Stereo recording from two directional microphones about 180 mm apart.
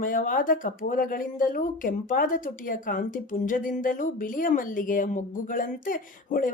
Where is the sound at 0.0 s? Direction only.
50° left (ahead or behind).